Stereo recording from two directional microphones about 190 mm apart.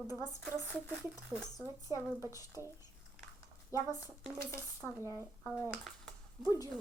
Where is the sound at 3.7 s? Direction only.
15° left (ahead or behind).